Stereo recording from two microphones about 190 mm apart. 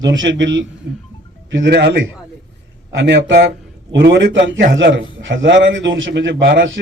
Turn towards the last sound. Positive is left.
turn(degrees=-70)  # may be behind; listen again after turning